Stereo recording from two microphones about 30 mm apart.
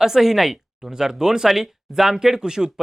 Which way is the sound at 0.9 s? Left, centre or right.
Right.